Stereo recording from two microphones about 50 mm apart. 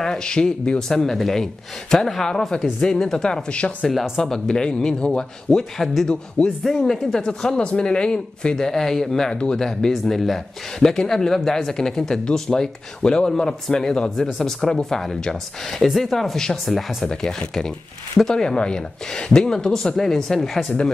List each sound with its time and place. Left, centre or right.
0.0 s speech: centre
3.5 s speech: left
6.8 s speech: centre